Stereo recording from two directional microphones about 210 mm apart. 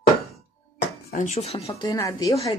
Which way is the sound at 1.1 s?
35° left (ahead or behind).